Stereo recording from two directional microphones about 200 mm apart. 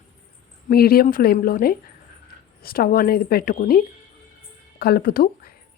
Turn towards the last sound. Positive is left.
turn(degrees=45)  # may be behind; listen again after turning